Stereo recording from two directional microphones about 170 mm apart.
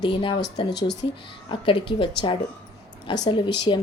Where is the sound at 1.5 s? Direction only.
30° left (ahead or behind).